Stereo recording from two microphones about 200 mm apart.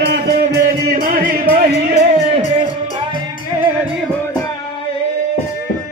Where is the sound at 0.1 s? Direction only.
50° right (ahead or behind).